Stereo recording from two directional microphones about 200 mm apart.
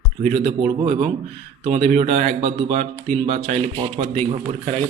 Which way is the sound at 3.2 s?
25° right (ahead or behind).